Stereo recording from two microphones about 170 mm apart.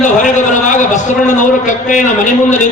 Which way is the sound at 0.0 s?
45° left (ahead or behind).